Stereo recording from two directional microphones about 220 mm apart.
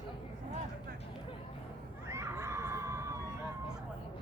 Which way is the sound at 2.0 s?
10° right (ahead or behind).